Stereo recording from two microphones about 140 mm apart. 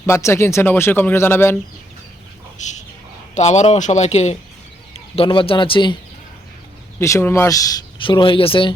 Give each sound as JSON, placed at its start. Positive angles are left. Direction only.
{"t": 0.0, "sound": "speech", "side_deg": 20}
{"t": 3.3, "sound": "speech", "side_deg": 55}
{"t": 7.0, "sound": "speech", "side_deg": 20}
{"t": 8.0, "sound": "speech", "side_deg": 35}